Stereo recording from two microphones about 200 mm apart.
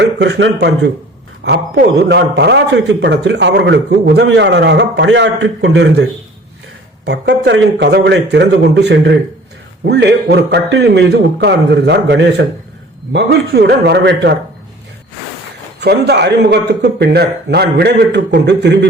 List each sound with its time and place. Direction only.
0.0 s a man's voice: 60° right (ahead or behind)
15.8 s a man's voice: 55° right (ahead or behind)